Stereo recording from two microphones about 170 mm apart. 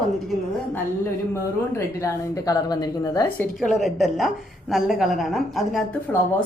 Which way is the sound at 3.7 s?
Centre (ahead or behind).